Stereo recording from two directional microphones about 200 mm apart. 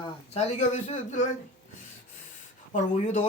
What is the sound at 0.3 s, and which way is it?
Speech, 35° left (ahead or behind).